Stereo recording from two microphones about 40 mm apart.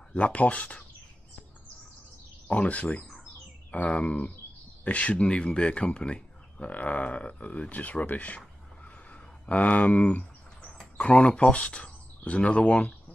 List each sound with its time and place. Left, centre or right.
0.1 s speech: left
2.4 s speech: left
6.7 s speech: left
8.8 s a sound: left
11.0 s speech: left